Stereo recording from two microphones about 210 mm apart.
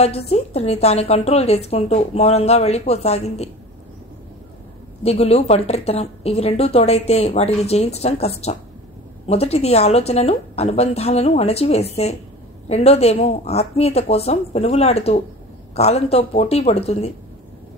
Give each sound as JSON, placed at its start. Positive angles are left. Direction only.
{"t": 0.0, "sound": "speech", "side_deg": 30}
{"t": 5.0, "sound": "speech", "side_deg": 30}